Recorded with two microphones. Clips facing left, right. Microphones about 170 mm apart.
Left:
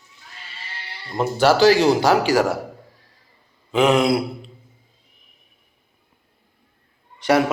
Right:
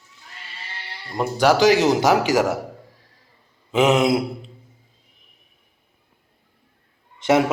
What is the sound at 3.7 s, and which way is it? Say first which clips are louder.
Speech: even; 20° right (ahead or behind).